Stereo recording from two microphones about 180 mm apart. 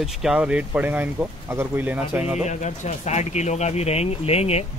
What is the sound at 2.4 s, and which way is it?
Speech, 40° left (ahead or behind).